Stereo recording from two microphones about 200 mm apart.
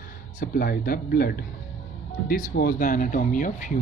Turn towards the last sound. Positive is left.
turn(degrees=40)  # may be behind; listen again after turning